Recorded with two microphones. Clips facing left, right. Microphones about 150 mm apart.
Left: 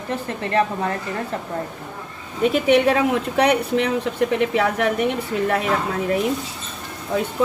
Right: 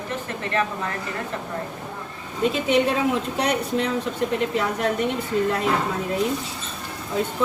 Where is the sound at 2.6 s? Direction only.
65° left (ahead or behind).